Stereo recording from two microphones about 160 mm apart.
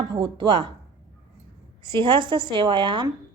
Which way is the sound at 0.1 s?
30° right (ahead or behind).